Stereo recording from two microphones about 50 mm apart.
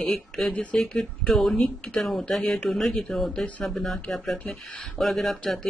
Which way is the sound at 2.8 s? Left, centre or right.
Centre.